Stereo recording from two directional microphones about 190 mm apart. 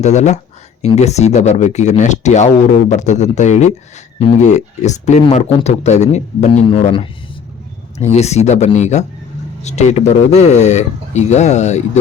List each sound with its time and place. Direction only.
0.0 s speech: 35° left (ahead or behind)
8.1 s speech: 35° left (ahead or behind)